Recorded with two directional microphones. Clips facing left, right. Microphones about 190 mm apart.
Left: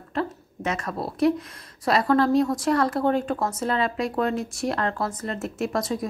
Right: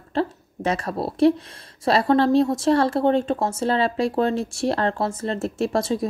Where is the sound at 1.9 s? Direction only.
30° right (ahead or behind).